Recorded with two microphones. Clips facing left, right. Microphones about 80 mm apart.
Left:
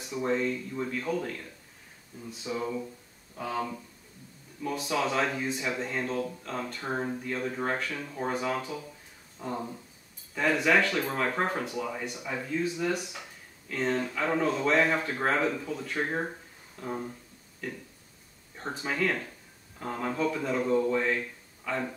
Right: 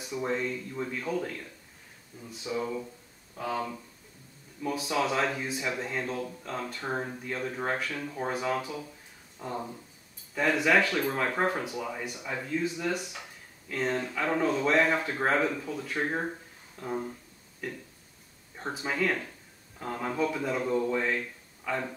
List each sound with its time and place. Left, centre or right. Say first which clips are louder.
0.0 s speech: left 2 dB; centre
2.4 s speech: even; centre
13.7 s speech: left 1 dB; centre